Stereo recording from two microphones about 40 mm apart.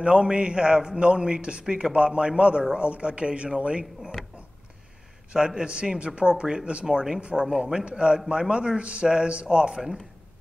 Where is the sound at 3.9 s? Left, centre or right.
Centre.